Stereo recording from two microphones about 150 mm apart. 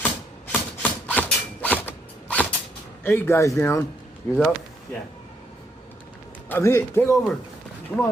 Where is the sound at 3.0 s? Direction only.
15° left (ahead or behind).